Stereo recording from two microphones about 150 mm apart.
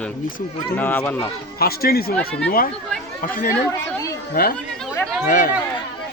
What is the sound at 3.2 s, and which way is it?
Speech, 65° left (ahead or behind).